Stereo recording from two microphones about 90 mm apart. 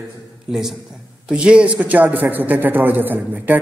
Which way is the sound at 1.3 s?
10° right (ahead or behind).